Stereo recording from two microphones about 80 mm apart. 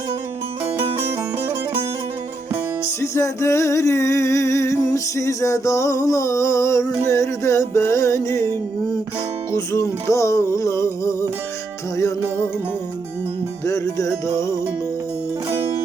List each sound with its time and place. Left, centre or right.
3.0 s music: left
9.5 s music: left
13.7 s music: left